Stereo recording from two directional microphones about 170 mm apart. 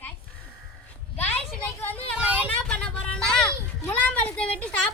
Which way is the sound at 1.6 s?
10° left (ahead or behind).